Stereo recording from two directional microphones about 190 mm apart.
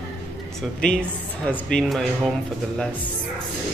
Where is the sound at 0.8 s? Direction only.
5° left (ahead or behind).